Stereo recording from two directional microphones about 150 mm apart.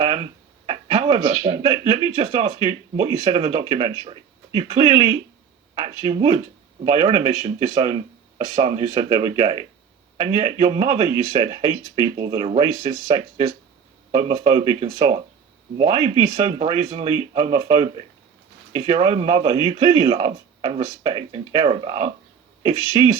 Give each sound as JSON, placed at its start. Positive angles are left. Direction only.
{"t": 0.0, "sound": "a sound", "side_deg": -40}
{"t": 1.2, "sound": "speech", "side_deg": -30}
{"t": 2.2, "sound": "speech", "side_deg": -30}